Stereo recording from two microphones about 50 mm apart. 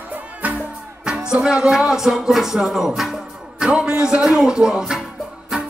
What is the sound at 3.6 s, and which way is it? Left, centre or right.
Speech, centre.